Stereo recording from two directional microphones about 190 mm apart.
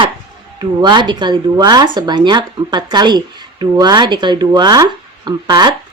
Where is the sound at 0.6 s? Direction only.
25° right (ahead or behind).